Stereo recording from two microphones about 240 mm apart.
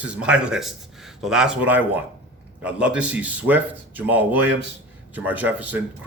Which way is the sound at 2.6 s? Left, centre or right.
Centre.